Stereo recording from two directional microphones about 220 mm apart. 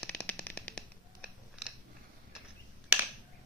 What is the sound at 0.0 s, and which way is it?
Shuffling cards, 5° left (ahead or behind).